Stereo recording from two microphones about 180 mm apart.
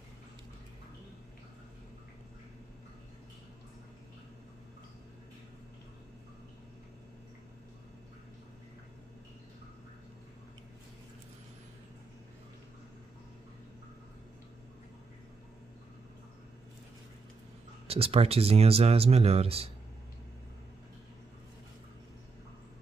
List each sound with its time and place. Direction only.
17.8 s speech: 35° right (ahead or behind)